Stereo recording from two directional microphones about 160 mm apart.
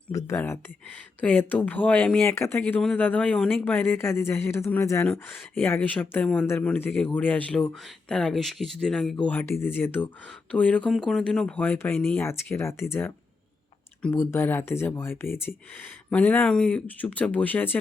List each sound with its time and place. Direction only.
0.1 s speech: 20° left (ahead or behind)